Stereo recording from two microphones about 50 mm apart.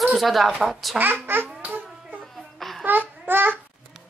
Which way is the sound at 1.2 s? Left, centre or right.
Right.